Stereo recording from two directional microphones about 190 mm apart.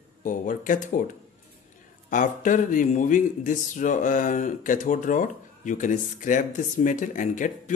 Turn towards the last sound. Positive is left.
turn(degrees=40)  # may be behind; listen again after turning